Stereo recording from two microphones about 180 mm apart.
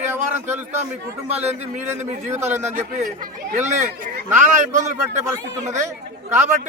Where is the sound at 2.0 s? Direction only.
40° right (ahead or behind).